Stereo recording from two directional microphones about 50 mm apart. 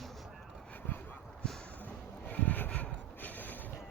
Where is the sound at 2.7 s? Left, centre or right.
Left.